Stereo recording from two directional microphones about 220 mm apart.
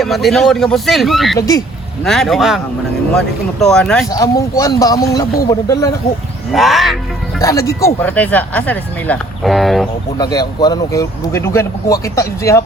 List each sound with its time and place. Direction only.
0.0 s speech: centre (ahead or behind)
1.4 s speech: 15° left (ahead or behind)
2.0 s speech: centre (ahead or behind)
4.1 s speech: 15° left (ahead or behind)
6.5 s speech: centre (ahead or behind)
7.4 s speech: 15° left (ahead or behind)
10.2 s speech: 20° left (ahead or behind)